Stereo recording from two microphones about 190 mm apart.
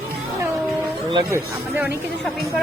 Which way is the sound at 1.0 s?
20° right (ahead or behind).